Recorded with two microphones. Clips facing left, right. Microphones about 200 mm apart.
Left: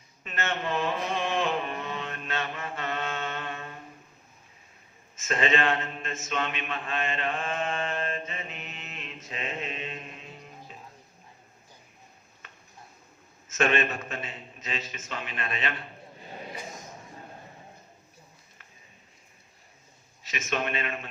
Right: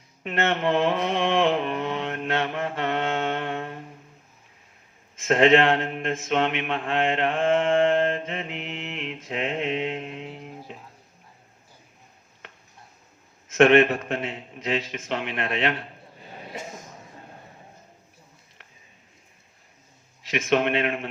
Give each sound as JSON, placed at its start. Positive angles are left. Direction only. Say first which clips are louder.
{"t": 0.2, "sound": "a sound", "louder": "right 8 dB", "side_deg": -65}
{"t": 5.3, "sound": "mantra", "louder": "right 8 dB", "side_deg": -65}
{"t": 13.6, "sound": "a man's voice", "louder": "right 10 dB", "side_deg": -65}
{"t": 20.3, "sound": "a man's voice", "louder": "right 9 dB", "side_deg": -65}